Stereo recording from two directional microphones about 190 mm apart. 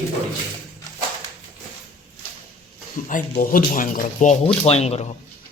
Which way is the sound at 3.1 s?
45° left (ahead or behind).